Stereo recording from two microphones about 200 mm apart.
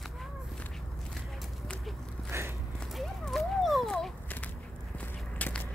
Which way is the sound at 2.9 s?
Centre (ahead or behind).